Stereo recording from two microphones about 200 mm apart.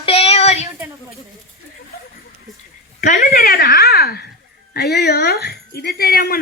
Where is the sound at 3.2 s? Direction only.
50° left (ahead or behind).